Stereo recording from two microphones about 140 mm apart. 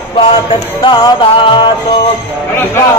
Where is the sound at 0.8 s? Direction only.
35° left (ahead or behind).